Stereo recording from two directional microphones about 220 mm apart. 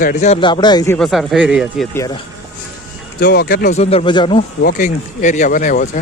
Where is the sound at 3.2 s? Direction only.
45° left (ahead or behind).